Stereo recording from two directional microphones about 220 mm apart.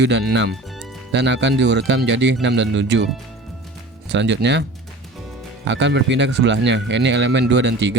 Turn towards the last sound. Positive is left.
turn(degrees=-50)  # may be behind; listen again after turning